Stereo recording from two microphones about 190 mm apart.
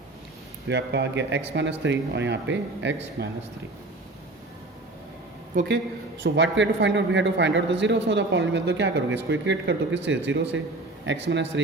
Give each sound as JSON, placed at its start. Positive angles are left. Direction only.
{"t": 0.7, "sound": "a man's voice", "side_deg": -65}
{"t": 6.2, "sound": "a man's voice", "side_deg": -70}